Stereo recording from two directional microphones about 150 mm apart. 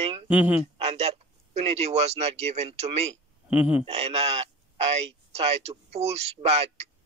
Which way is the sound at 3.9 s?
45° right (ahead or behind).